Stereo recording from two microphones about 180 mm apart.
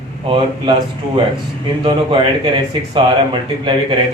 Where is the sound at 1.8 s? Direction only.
25° right (ahead or behind).